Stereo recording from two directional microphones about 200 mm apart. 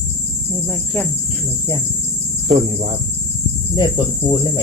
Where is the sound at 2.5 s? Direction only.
30° right (ahead or behind).